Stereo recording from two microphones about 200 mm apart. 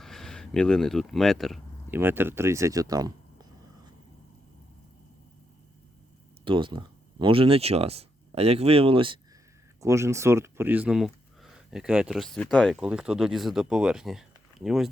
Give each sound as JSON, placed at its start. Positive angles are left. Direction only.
{"t": 0.0, "sound": "speech", "side_deg": 0}
{"t": 1.9, "sound": "speech", "side_deg": -10}
{"t": 6.4, "sound": "speech", "side_deg": -25}
{"t": 9.8, "sound": "speech", "side_deg": -15}